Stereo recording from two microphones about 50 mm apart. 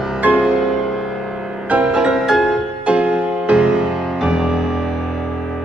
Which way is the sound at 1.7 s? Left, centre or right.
Right.